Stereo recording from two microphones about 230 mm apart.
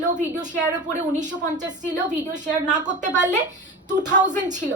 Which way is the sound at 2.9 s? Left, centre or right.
Right.